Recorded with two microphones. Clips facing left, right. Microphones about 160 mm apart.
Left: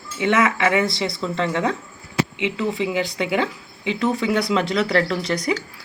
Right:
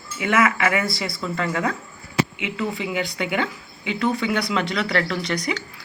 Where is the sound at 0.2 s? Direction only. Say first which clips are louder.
Left 1 dB; 25° left (ahead or behind).